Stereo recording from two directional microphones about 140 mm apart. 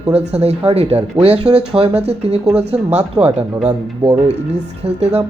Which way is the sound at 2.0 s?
50° right (ahead or behind).